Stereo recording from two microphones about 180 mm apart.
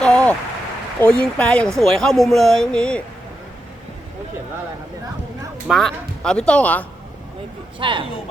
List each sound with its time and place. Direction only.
0.0 s a sound: 5° left (ahead or behind)
1.0 s speech: 5° left (ahead or behind)
5.6 s speech: centre (ahead or behind)
7.8 s speech: 30° right (ahead or behind)